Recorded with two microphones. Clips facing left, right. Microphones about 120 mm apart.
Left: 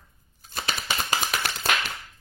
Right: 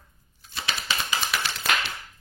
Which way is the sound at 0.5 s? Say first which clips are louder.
Left 1 dB; 45° left (ahead or behind).